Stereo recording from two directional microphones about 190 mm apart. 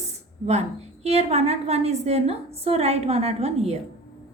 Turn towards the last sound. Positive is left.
turn(degrees=-35)  # may be behind; listen again after turning